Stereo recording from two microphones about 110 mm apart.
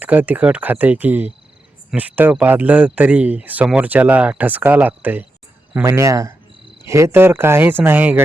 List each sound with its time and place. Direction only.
0.0 s speech: 15° right (ahead or behind)
5.9 s speech: 25° right (ahead or behind)